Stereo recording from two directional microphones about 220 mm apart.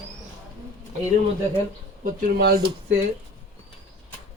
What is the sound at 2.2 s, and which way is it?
Speech, 45° right (ahead or behind).